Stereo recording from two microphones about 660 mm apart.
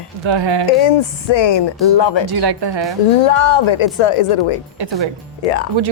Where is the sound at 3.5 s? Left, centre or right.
Left.